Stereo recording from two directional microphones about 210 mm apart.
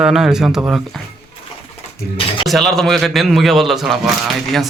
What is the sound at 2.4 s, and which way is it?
A man's voice, centre (ahead or behind).